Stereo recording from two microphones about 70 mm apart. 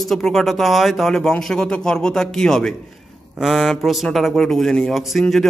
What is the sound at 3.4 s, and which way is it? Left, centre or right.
A man's voice, centre.